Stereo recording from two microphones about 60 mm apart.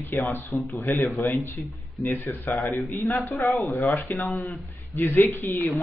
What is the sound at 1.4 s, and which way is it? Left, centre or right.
A man's voice, left.